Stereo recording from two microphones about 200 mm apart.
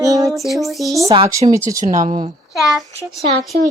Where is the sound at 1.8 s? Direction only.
40° right (ahead or behind).